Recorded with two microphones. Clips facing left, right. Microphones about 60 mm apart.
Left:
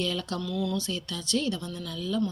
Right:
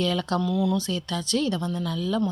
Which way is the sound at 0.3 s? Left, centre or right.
Right.